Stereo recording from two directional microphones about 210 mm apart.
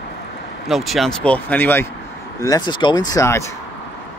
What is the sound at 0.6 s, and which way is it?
Speech, centre (ahead or behind).